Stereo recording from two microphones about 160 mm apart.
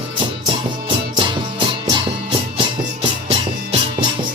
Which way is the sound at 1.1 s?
30° right (ahead or behind).